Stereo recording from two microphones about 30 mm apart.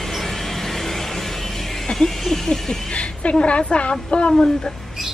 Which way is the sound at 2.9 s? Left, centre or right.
Left.